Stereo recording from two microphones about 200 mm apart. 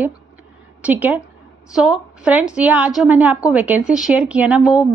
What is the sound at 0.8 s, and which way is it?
A woman's voice, 10° right (ahead or behind).